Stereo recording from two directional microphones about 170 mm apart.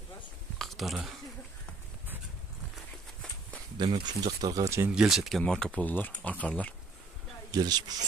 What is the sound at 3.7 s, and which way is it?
Speech, 25° right (ahead or behind).